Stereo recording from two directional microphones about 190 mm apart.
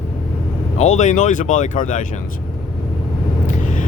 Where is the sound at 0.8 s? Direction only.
35° left (ahead or behind).